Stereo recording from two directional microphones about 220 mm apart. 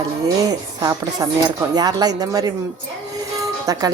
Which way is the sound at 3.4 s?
15° right (ahead or behind).